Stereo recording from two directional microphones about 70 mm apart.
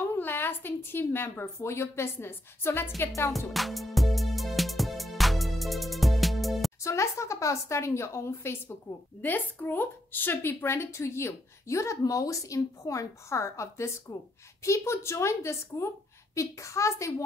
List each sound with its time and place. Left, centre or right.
0.1 s a woman's voice: left
3.3 s music: centre
6.8 s a woman's voice: left
9.2 s a woman's voice: left